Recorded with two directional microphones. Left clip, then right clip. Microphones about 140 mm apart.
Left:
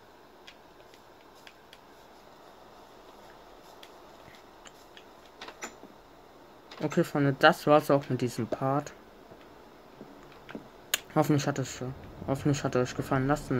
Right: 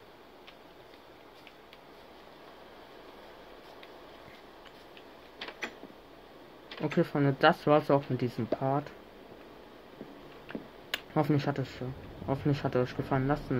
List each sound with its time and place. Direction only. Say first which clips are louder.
5.4 s train: right 3 dB; 20° right (ahead or behind)
7.0 s speech: left 2 dB; centre (ahead or behind)
10.9 s speech: left 3 dB; 10° left (ahead or behind)